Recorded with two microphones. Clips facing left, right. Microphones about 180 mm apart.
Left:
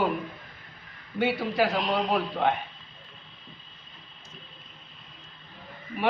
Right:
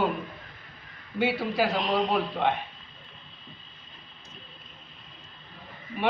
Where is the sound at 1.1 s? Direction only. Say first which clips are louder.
Even; centre (ahead or behind).